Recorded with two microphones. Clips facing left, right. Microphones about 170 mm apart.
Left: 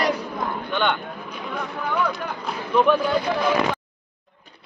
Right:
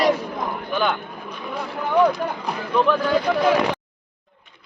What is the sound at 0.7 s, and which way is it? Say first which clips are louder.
Speech: right 1 dB; 5° right (ahead or behind).